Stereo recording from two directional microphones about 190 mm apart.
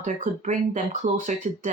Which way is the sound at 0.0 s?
40° right (ahead or behind).